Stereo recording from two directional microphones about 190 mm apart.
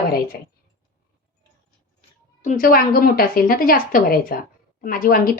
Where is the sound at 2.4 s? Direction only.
45° left (ahead or behind).